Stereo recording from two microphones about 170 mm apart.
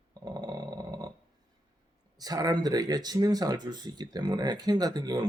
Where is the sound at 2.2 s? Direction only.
20° right (ahead or behind).